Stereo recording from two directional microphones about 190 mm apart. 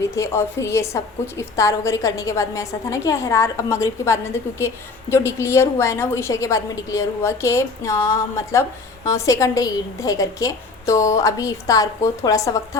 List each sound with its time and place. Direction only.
0.1 s a woman's voice: 15° left (ahead or behind)